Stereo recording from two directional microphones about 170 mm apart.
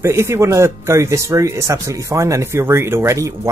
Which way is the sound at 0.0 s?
15° right (ahead or behind).